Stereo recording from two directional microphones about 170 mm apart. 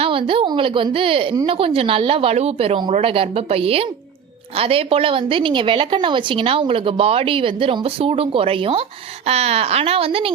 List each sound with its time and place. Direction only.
0.0 s a woman's voice: 35° right (ahead or behind)